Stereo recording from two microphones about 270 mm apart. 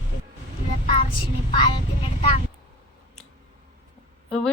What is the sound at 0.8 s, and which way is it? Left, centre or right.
Child singing, left.